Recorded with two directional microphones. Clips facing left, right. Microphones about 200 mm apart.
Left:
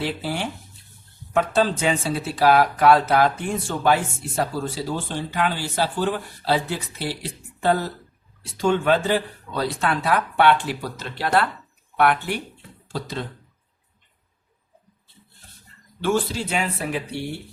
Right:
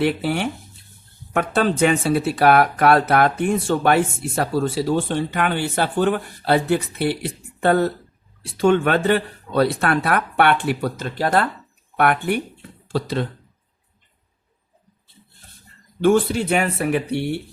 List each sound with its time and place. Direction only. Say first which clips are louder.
0.0 s speech: right 6 dB; 65° right (ahead or behind)
16.0 s speech: right 6 dB; 55° right (ahead or behind)